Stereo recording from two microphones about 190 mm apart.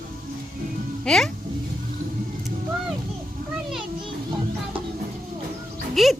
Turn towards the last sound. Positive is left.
turn(degrees=0)  # may be behind; listen again after turning